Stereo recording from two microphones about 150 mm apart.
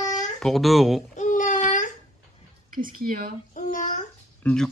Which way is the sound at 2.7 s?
70° right (ahead or behind).